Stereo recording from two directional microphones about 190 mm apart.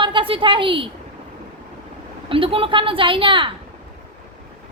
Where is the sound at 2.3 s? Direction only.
30° right (ahead or behind).